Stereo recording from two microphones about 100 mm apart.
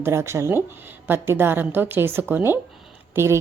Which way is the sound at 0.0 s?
25° right (ahead or behind).